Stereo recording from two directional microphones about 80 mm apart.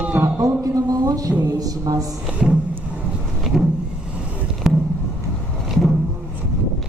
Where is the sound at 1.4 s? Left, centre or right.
Right.